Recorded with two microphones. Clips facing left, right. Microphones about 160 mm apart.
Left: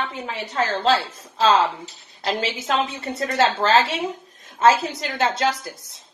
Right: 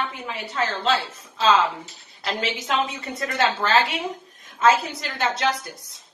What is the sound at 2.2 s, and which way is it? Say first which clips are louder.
A woman's voice: left 3 dB; 30° left (ahead or behind).